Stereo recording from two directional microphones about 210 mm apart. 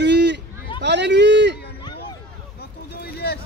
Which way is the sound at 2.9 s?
50° left (ahead or behind).